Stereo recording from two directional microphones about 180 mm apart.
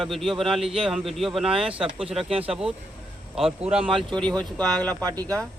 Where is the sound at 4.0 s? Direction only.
5° left (ahead or behind).